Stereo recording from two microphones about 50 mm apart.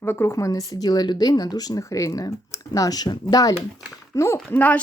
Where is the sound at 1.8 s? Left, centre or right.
Left.